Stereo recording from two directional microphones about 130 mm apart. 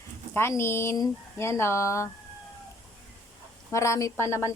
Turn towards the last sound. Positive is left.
turn(degrees=20)  # may be behind; listen again after turning